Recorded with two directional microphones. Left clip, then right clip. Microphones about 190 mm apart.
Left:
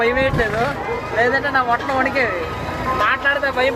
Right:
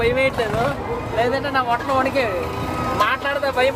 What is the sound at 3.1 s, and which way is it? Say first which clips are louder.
Speech: left 3 dB; 15° right (ahead or behind).